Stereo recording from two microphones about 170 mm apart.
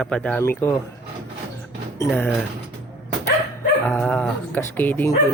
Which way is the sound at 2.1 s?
10° left (ahead or behind).